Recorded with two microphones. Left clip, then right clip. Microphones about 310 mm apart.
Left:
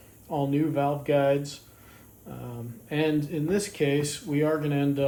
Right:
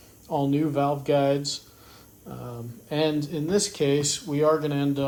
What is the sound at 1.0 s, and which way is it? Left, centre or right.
Speech, centre.